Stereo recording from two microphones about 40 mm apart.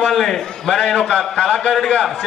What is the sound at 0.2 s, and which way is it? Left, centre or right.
A man's voice, centre.